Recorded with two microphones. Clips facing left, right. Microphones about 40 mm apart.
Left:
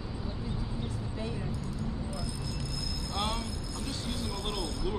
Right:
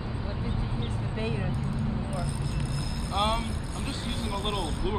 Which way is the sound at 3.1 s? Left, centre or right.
Right.